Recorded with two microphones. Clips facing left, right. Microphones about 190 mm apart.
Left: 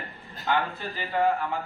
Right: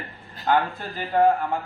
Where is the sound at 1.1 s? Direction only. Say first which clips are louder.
Right 5 dB; 50° right (ahead or behind).